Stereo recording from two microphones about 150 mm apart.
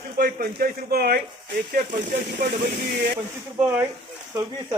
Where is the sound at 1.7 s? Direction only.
75° right (ahead or behind).